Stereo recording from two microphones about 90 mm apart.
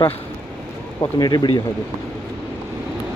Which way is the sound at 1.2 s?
50° left (ahead or behind).